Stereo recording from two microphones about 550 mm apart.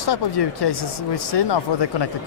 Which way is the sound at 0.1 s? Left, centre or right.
Left.